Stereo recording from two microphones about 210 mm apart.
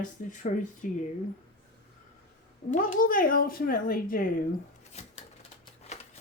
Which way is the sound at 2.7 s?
40° left (ahead or behind).